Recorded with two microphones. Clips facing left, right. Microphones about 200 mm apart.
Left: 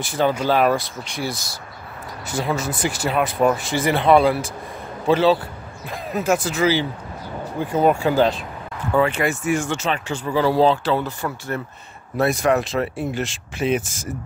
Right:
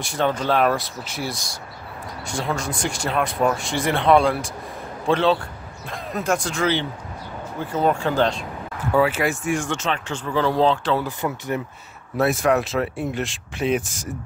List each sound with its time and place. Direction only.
0.0 s speech: centre (ahead or behind)
8.9 s speech: 5° right (ahead or behind)
11.1 s speech: 20° right (ahead or behind)
12.2 s speech: centre (ahead or behind)